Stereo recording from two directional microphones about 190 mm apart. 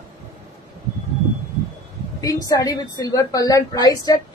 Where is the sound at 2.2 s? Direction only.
20° left (ahead or behind).